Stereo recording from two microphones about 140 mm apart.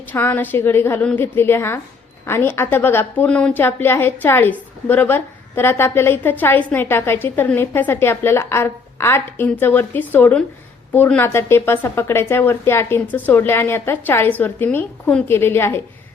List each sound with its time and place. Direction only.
0.0 s a woman's voice: 15° left (ahead or behind)